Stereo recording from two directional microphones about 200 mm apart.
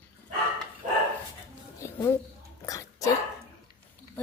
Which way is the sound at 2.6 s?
15° left (ahead or behind).